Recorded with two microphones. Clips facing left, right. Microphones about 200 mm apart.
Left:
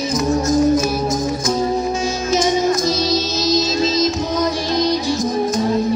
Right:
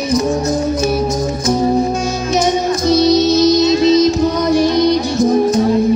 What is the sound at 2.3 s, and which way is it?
Music, 60° right (ahead or behind).